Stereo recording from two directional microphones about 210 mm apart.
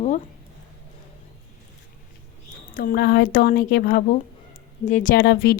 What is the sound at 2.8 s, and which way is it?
A woman's voice, 45° left (ahead or behind).